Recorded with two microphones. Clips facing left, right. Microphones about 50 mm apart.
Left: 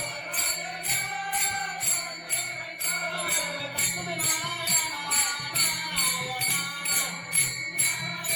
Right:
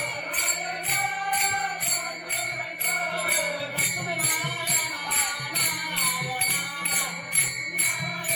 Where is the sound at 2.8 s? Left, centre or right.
Centre.